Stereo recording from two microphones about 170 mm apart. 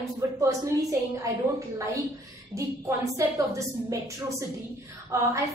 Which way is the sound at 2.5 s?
20° right (ahead or behind).